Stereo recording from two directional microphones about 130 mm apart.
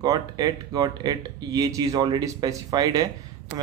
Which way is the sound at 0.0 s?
30° right (ahead or behind).